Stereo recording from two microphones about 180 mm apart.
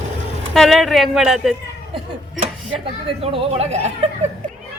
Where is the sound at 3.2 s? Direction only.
35° right (ahead or behind).